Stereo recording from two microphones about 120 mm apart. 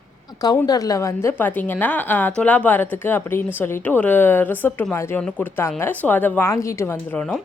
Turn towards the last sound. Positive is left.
turn(degrees=5)  # may be behind; listen again after turning